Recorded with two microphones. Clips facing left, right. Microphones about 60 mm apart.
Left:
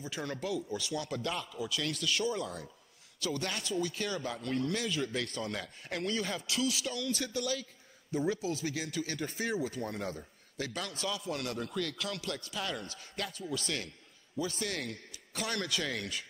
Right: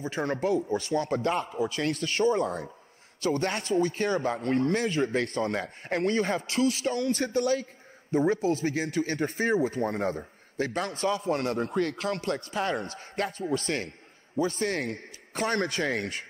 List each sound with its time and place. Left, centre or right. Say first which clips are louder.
0.0 s speech: right 9 dB; right